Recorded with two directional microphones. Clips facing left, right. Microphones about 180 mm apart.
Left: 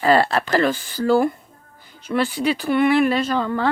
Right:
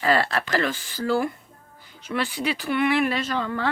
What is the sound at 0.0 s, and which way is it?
Speech, 35° left (ahead or behind).